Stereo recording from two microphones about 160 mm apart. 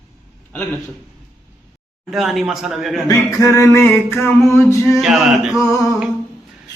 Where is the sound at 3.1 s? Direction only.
20° left (ahead or behind).